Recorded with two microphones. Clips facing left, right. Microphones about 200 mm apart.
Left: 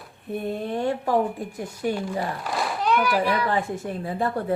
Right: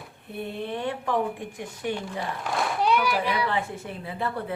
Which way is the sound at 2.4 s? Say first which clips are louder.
Even; centre (ahead or behind).